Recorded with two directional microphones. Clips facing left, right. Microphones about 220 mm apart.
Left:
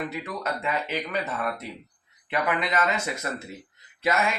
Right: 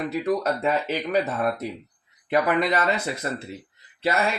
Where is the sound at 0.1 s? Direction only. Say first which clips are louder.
Right 8 dB; 35° right (ahead or behind).